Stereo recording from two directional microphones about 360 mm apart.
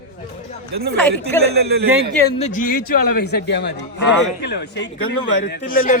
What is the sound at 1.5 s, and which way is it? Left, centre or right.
Speech, right.